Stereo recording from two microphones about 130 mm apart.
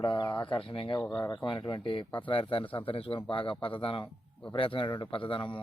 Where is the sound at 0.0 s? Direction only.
35° left (ahead or behind).